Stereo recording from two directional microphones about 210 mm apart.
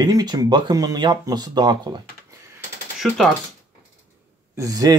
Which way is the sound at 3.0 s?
Centre (ahead or behind).